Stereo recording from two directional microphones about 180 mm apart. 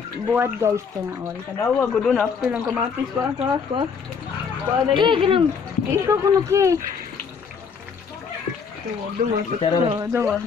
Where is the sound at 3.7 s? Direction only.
30° right (ahead or behind).